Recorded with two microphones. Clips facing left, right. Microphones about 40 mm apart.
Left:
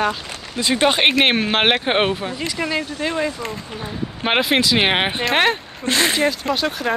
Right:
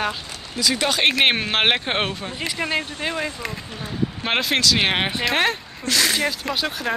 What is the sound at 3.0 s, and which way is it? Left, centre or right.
Speech, centre.